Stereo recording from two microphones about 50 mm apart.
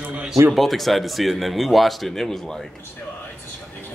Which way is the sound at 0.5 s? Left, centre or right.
Centre.